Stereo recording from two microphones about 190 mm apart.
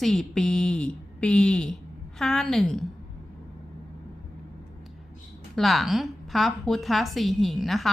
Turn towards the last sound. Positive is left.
turn(degrees=0)  # may be behind; listen again after turning